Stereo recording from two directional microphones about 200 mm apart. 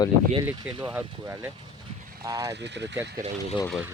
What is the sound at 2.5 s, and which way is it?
Speech, 60° right (ahead or behind).